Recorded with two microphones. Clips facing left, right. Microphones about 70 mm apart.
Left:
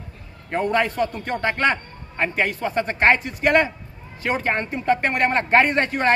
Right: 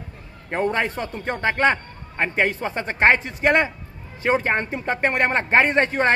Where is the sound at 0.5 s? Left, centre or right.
Right.